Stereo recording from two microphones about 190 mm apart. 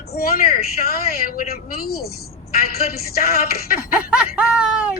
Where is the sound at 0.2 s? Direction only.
50° left (ahead or behind).